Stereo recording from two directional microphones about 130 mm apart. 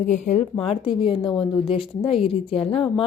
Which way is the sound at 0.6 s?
45° left (ahead or behind).